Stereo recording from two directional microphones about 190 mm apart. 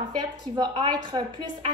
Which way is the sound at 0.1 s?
20° right (ahead or behind).